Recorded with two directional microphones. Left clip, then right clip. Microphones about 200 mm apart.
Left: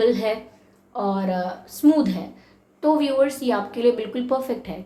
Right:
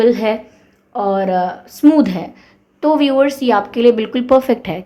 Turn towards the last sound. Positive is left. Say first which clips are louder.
# right 12 dB
turn(degrees=-45)  # may be behind; listen again after turning